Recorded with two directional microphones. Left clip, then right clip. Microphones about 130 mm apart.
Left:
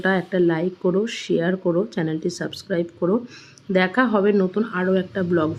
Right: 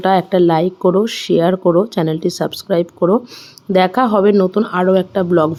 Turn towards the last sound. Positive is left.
turn(degrees=-40)  # may be behind; listen again after turning